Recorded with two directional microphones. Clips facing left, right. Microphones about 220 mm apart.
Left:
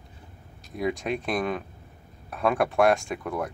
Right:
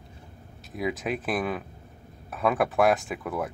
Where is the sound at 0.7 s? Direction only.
Centre (ahead or behind).